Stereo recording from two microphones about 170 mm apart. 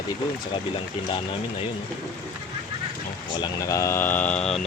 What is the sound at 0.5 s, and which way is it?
Speech, 30° left (ahead or behind).